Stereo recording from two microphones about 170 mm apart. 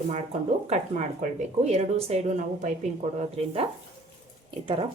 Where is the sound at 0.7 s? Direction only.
45° right (ahead or behind).